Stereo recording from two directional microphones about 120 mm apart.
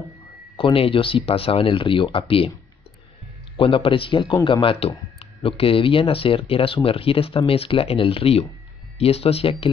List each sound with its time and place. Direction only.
0.6 s speech: 50° left (ahead or behind)
3.5 s speech: 50° left (ahead or behind)